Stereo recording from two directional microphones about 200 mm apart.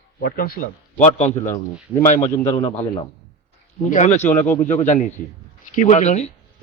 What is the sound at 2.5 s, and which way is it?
Speech, 30° left (ahead or behind).